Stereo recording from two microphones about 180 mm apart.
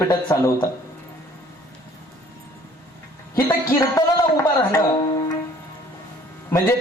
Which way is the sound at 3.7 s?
20° left (ahead or behind).